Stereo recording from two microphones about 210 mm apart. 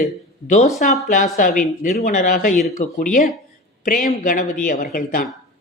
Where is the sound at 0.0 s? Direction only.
35° left (ahead or behind).